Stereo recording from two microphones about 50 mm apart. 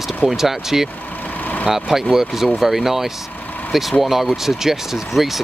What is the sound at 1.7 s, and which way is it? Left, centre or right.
Speech, centre.